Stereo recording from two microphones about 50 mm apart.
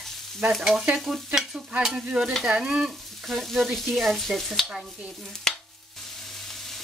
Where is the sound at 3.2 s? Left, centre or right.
Centre.